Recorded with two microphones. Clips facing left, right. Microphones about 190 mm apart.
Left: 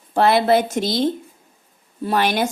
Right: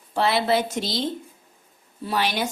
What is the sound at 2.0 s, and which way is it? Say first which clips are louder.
Speech: left 5 dB; 50° left (ahead or behind).